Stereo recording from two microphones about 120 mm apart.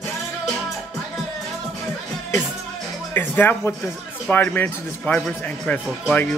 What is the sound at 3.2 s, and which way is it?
Speech, 15° left (ahead or behind).